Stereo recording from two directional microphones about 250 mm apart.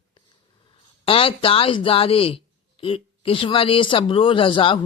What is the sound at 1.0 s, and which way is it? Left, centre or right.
Speech, left.